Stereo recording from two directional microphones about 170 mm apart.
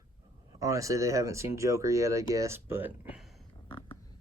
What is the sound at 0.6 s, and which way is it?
Speech, 20° right (ahead or behind).